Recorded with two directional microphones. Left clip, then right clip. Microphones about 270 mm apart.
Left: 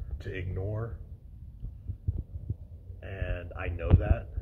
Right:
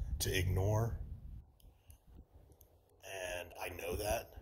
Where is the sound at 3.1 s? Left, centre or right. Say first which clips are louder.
Left 2 dB; right.